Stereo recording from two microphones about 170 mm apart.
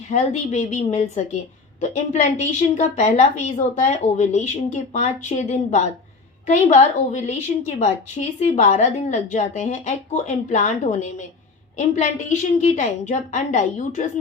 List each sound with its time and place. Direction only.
0.1 s a woman's voice: 45° left (ahead or behind)